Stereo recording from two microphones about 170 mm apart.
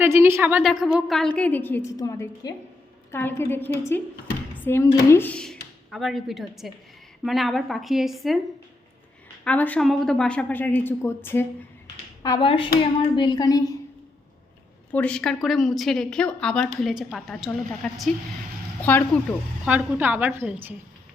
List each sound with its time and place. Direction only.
0.0 s a woman's voice: 15° right (ahead or behind)
9.4 s a woman's voice: 10° left (ahead or behind)
12.2 s a woman's voice: 30° left (ahead or behind)
14.9 s a woman's voice: 5° left (ahead or behind)
19.6 s a woman's voice: 10° right (ahead or behind)